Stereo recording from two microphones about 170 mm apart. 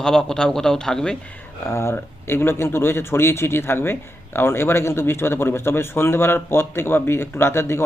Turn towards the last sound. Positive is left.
turn(degrees=15)  # may be behind; listen again after turning